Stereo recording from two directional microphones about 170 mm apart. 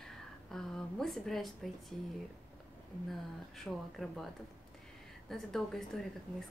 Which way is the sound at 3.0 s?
Centre (ahead or behind).